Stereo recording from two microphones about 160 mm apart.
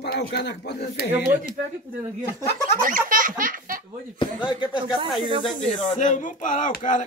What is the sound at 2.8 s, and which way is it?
Speech, 55° right (ahead or behind).